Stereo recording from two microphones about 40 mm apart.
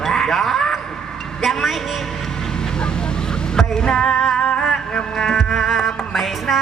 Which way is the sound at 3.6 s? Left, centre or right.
Centre.